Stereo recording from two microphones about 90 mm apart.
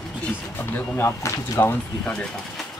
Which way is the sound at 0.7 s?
20° left (ahead or behind).